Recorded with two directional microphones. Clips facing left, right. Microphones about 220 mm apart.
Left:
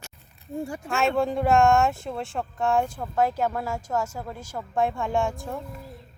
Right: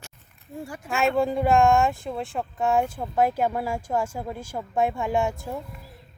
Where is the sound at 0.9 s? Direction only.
Centre (ahead or behind); by 4.3 s 20° right (ahead or behind).